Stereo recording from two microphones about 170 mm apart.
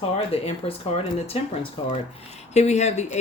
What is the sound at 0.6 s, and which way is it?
Speech, 35° left (ahead or behind).